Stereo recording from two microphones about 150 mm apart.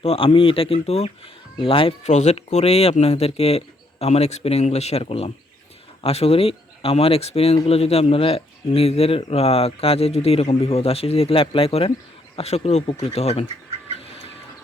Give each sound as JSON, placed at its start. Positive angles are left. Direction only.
{"t": 0.0, "sound": "speech", "side_deg": 40}
{"t": 2.0, "sound": "speech", "side_deg": 50}